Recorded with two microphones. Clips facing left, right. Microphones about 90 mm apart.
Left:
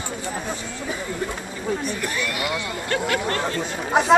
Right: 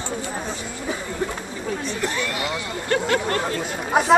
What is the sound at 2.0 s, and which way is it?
Speech, 25° right (ahead or behind).